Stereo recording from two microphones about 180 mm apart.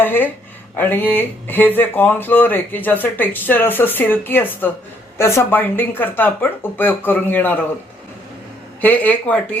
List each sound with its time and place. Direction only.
0.0 s speech: 10° left (ahead or behind)
8.8 s speech: 10° left (ahead or behind)